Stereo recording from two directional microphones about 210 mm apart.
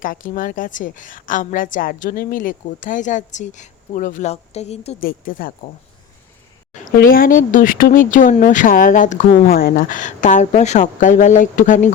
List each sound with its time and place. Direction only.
0.0 s a woman's voice: 40° left (ahead or behind)
4.9 s speech: 45° left (ahead or behind)
6.9 s a woman's voice: 45° left (ahead or behind)